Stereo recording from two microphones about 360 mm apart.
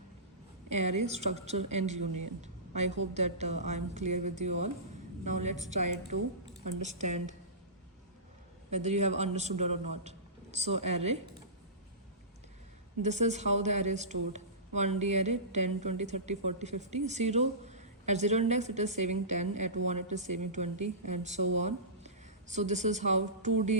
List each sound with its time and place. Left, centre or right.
0.7 s a man's voice: centre
2.4 s a sound: centre
3.2 s speech: centre
6.8 s speech: centre
8.7 s a man's voice: centre
13.0 s a woman's voice: centre